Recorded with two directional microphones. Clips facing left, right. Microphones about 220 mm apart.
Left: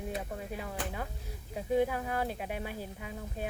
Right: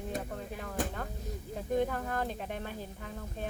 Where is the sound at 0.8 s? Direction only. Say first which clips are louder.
Right 9 dB; 45° right (ahead or behind).